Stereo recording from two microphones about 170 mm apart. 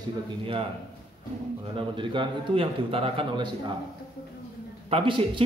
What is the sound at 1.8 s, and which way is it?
A man's voice, 30° right (ahead or behind).